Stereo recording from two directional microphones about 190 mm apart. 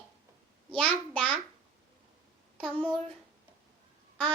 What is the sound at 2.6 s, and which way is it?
Child singing, 5° left (ahead or behind).